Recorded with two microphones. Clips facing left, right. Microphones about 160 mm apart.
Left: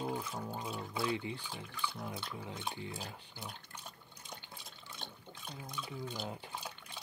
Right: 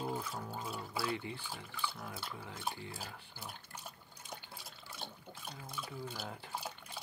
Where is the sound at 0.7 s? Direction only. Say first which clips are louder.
Left 2 dB; 20° left (ahead or behind).